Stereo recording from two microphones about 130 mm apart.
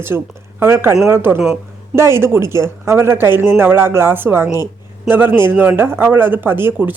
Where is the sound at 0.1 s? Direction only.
15° right (ahead or behind).